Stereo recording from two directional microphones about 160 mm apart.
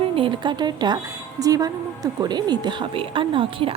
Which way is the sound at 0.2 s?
30° right (ahead or behind).